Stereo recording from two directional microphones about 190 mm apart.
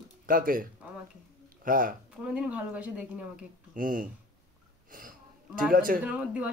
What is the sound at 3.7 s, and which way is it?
Speech, 45° right (ahead or behind).